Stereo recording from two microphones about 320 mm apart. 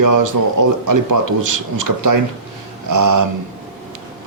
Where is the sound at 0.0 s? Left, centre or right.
Right.